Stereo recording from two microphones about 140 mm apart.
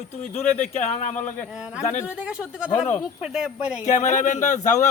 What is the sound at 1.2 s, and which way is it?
Speech, 10° left (ahead or behind).